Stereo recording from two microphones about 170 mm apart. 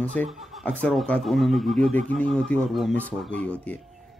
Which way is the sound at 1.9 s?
45° right (ahead or behind).